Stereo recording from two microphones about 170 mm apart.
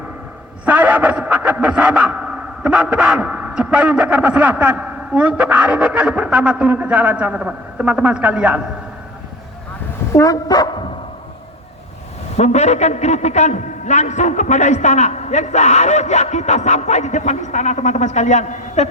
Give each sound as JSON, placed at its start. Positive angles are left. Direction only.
{"t": 0.6, "sound": "a sound", "side_deg": -10}
{"t": 10.2, "sound": "speech", "side_deg": 20}
{"t": 12.4, "sound": "a man's voice", "side_deg": 40}